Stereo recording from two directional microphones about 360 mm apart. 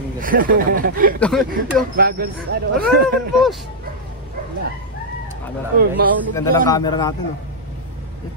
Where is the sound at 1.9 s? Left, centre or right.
Right.